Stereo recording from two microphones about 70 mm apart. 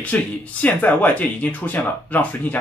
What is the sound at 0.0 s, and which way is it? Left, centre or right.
Speech, left.